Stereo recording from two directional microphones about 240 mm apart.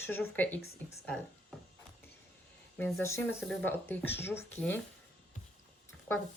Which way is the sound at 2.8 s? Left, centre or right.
Centre.